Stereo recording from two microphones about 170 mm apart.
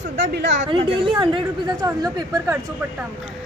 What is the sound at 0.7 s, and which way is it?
Speech, 30° right (ahead or behind).